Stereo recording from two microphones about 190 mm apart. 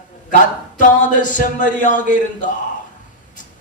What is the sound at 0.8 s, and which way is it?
Speech, 40° left (ahead or behind).